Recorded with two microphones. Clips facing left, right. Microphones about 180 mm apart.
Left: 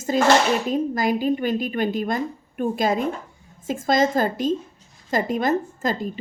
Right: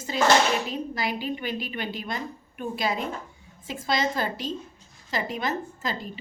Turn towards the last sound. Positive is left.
turn(degrees=45)  # may be behind; listen again after turning